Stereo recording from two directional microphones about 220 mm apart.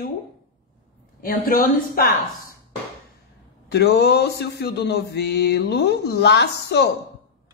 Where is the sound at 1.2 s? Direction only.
40° left (ahead or behind).